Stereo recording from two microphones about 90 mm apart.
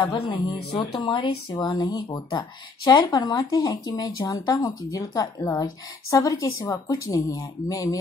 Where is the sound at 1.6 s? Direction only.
50° left (ahead or behind).